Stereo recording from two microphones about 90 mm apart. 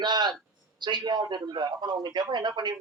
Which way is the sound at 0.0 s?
55° right (ahead or behind).